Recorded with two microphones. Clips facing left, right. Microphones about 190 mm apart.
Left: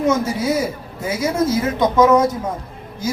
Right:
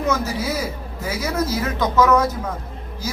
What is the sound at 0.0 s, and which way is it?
Speech, 25° left (ahead or behind).